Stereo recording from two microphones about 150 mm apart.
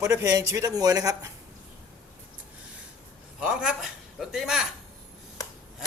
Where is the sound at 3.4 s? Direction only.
5° right (ahead or behind).